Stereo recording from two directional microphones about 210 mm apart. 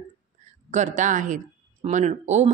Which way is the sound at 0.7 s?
35° right (ahead or behind).